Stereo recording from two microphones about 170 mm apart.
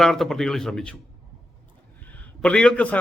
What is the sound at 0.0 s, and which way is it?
Speech, centre (ahead or behind).